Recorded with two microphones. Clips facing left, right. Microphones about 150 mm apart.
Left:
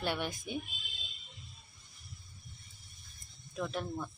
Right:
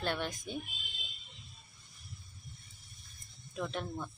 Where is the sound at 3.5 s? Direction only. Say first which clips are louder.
Left 1 dB; centre (ahead or behind).